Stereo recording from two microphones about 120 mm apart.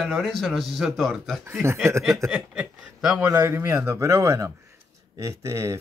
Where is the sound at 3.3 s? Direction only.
20° right (ahead or behind).